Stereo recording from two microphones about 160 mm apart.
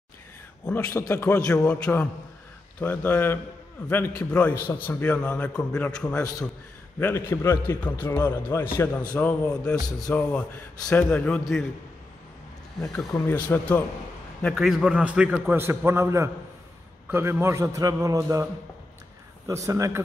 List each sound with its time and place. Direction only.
0.9 s a man's voice: 15° left (ahead or behind)
12.8 s a man's voice: centre (ahead or behind)
13.1 s a man's voice: 15° left (ahead or behind); by 20.0 s 20° right (ahead or behind)